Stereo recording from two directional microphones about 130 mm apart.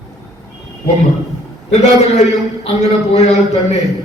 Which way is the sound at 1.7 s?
60° left (ahead or behind).